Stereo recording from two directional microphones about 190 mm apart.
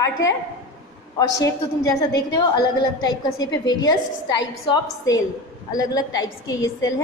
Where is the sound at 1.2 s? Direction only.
20° left (ahead or behind).